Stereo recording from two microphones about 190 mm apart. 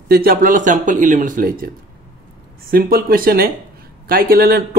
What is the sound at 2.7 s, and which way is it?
Speech, 50° right (ahead or behind).